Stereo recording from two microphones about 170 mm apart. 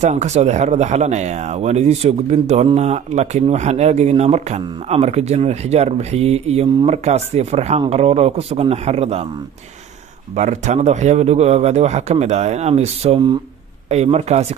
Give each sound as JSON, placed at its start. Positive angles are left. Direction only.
{"t": 0.0, "sound": "speech", "side_deg": -45}
{"t": 10.3, "sound": "speech", "side_deg": -45}